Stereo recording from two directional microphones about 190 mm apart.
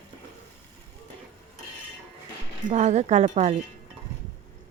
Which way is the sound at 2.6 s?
35° right (ahead or behind).